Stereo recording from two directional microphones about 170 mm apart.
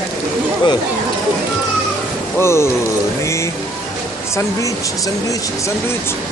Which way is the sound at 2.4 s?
15° left (ahead or behind).